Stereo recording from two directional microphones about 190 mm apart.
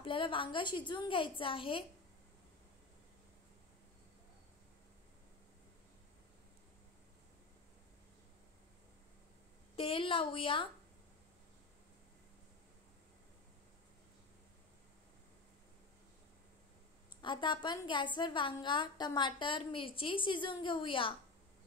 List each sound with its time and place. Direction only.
0.0 s a woman's voice: 25° left (ahead or behind)
9.8 s a woman's voice: 30° left (ahead or behind)
17.2 s a woman's voice: 25° left (ahead or behind)